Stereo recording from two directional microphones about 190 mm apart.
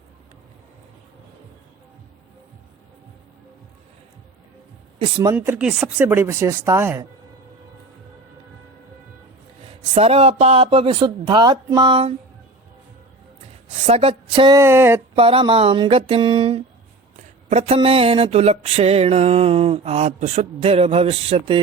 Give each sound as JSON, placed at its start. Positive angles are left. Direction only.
{"t": 5.3, "sound": "speech", "side_deg": -10}
{"t": 9.6, "sound": "mantra", "side_deg": -30}
{"t": 13.8, "sound": "speech", "side_deg": -30}
{"t": 15.1, "sound": "speech", "side_deg": -30}
{"t": 17.5, "sound": "mantra", "side_deg": -35}